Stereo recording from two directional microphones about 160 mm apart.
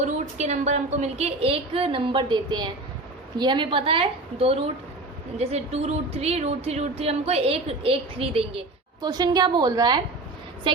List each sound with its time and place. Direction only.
0.0 s a woman's voice: 45° right (ahead or behind); by 10.0 s 25° right (ahead or behind)